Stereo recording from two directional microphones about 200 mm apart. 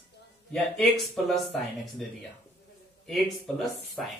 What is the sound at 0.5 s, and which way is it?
Speech, centre (ahead or behind).